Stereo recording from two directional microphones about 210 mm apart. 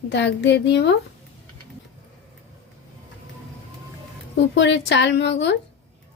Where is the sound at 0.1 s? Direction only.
55° left (ahead or behind).